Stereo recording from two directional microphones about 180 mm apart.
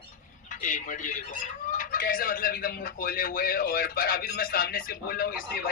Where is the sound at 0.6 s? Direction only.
45° left (ahead or behind).